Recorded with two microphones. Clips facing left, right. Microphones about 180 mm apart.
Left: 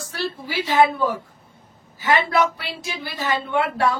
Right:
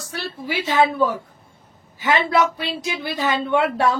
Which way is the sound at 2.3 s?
20° right (ahead or behind).